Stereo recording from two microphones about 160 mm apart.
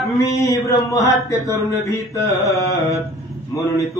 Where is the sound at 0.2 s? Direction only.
20° left (ahead or behind).